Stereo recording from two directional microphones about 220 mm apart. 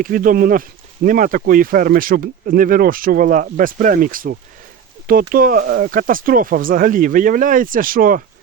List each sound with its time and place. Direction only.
0.0 s speech: 40° right (ahead or behind)